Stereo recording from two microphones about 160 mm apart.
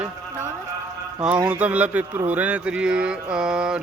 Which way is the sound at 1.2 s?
5° right (ahead or behind).